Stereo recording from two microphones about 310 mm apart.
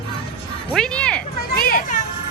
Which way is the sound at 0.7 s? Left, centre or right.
Centre.